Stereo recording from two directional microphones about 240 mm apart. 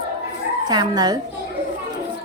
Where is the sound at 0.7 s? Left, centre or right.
Centre.